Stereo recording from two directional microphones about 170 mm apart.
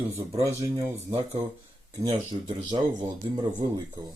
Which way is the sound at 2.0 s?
25° right (ahead or behind).